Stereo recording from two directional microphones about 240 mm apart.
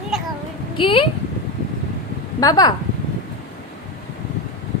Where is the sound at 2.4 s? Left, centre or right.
Centre.